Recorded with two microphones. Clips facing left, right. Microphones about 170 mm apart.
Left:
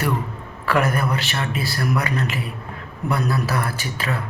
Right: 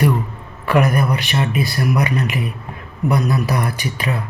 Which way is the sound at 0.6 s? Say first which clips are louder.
Right 4 dB; 15° right (ahead or behind).